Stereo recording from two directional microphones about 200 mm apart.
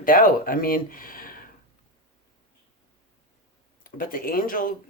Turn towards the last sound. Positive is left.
turn(degrees=45)  # may be behind; listen again after turning